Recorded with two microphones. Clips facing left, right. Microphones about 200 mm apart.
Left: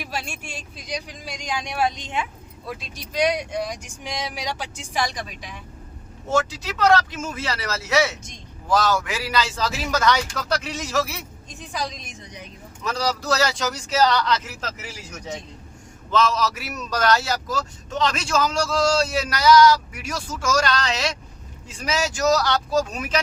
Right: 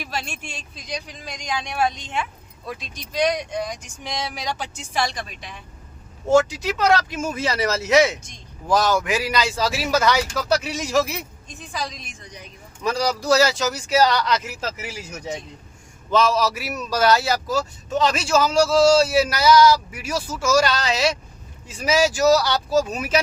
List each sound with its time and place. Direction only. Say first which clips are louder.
0.0 s speech: right 1 dB; 10° left (ahead or behind)
2.6 s speech: right 1 dB; 5° left (ahead or behind)
6.3 s a man's voice: right 6 dB; 15° right (ahead or behind)
12.8 s a man's voice: right 3 dB; 10° right (ahead or behind)